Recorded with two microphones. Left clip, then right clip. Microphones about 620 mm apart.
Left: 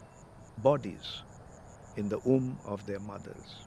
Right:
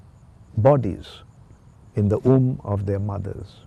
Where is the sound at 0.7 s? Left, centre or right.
Right.